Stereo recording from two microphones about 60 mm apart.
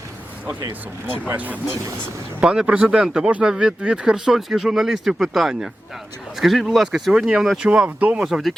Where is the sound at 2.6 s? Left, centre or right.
Centre.